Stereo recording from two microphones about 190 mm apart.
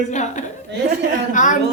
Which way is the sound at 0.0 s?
40° left (ahead or behind).